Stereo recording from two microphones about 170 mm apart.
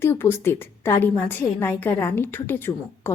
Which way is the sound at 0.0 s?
15° left (ahead or behind).